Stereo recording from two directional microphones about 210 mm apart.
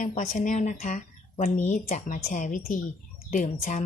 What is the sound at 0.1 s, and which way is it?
Speech, 35° left (ahead or behind).